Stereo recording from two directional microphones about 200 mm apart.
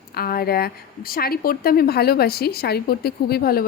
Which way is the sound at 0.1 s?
50° left (ahead or behind).